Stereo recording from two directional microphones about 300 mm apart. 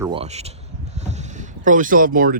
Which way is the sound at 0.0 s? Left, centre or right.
Centre.